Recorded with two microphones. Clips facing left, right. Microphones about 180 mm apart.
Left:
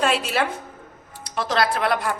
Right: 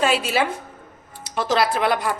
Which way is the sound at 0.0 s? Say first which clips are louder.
Right 2 dB; 5° right (ahead or behind).